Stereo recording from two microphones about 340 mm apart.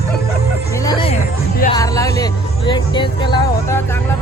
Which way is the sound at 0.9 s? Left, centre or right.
Centre.